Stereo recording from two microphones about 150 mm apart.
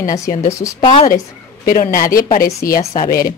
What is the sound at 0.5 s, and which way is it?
Speech, 20° left (ahead or behind).